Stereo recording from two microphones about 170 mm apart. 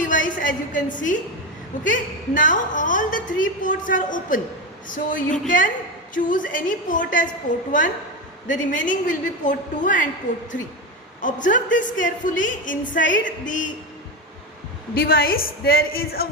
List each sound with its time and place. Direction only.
0.0 s a sound: 50° left (ahead or behind)
0.4 s a woman's voice: 50° left (ahead or behind)
14.9 s a woman's voice: 60° left (ahead or behind)